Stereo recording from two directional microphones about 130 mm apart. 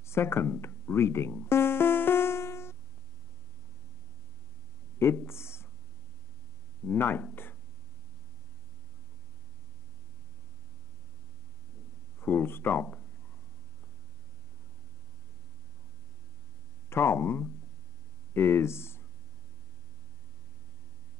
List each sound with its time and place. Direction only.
0.0 s music: 20° left (ahead or behind)
4.9 s speech: 20° left (ahead or behind)
6.9 s speech: 15° left (ahead or behind)
12.2 s a sound: 15° left (ahead or behind)
16.9 s a sound: 20° left (ahead or behind)
18.3 s speech: 20° left (ahead or behind)